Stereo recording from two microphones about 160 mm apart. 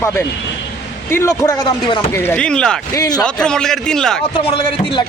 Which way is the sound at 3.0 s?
25° left (ahead or behind).